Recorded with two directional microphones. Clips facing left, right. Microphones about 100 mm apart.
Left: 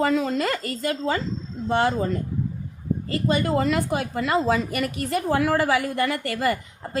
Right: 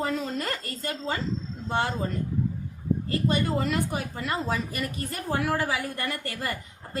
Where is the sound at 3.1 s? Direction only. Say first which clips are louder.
Left 5 dB; 90° left.